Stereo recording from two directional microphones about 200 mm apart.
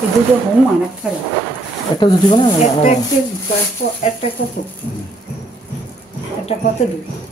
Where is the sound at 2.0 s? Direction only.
25° left (ahead or behind).